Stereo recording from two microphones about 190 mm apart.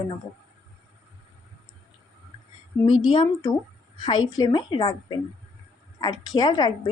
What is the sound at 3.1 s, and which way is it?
Speech, 25° left (ahead or behind).